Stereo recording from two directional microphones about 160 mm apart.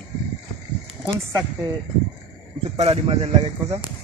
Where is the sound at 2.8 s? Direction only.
40° right (ahead or behind).